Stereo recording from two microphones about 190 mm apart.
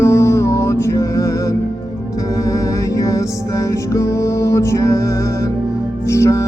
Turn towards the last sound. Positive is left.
turn(degrees=15)  # may be behind; listen again after turning